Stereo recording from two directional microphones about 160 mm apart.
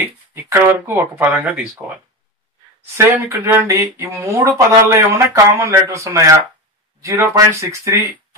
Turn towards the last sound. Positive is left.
turn(degrees=-20)  # may be behind; listen again after turning